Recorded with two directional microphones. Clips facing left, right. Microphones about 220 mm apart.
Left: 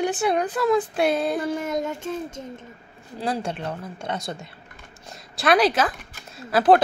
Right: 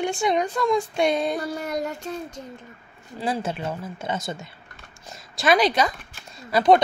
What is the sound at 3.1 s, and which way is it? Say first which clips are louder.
A woman's voice: even; centre (ahead or behind).